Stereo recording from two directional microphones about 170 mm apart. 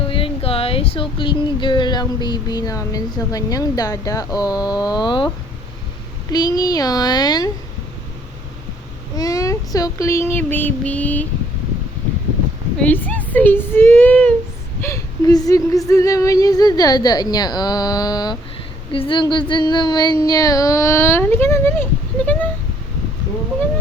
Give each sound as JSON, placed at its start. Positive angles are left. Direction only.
{"t": 0.1, "sound": "speech", "side_deg": 35}
{"t": 6.3, "sound": "speech", "side_deg": 25}
{"t": 9.1, "sound": "child singing", "side_deg": 20}
{"t": 12.8, "sound": "child singing", "side_deg": 10}
{"t": 14.8, "sound": "a woman's voice", "side_deg": 15}